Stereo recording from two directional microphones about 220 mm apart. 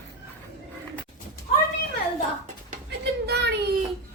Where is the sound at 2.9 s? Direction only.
50° right (ahead or behind).